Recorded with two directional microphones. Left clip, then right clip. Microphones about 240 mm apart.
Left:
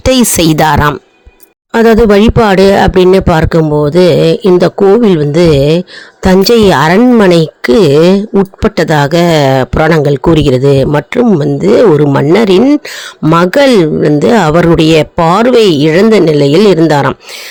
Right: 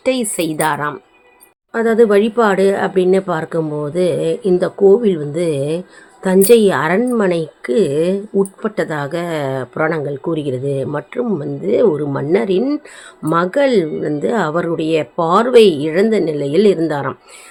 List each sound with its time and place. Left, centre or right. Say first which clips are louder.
0.0 s speech: left 10 dB; left